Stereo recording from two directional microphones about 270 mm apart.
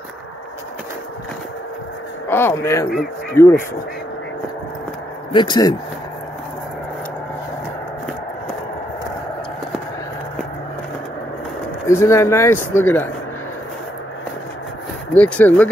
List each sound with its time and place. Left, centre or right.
2.2 s speech: centre
5.3 s speech: centre
11.9 s speech: centre
15.1 s speech: centre